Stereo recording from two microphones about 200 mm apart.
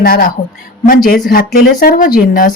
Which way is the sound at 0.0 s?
45° left (ahead or behind).